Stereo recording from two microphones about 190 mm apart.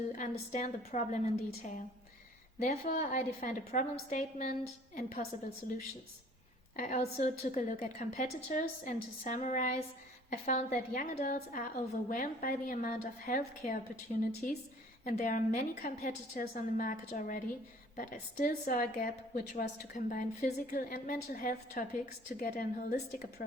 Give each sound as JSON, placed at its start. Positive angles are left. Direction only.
{"t": 0.2, "sound": "a woman's voice", "side_deg": 40}
{"t": 6.7, "sound": "a woman's voice", "side_deg": 40}